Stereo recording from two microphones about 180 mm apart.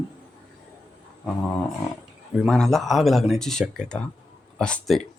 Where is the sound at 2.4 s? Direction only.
Centre (ahead or behind).